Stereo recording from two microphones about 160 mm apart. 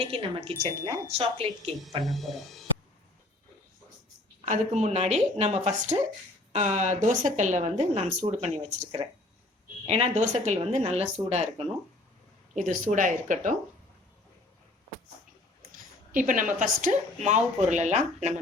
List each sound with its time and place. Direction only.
0.0 s speech: 35° right (ahead or behind)
2.0 s speech: centre (ahead or behind)
4.4 s speech: 50° right (ahead or behind)
12.5 s speech: 50° right (ahead or behind)
15.7 s speech: 55° right (ahead or behind)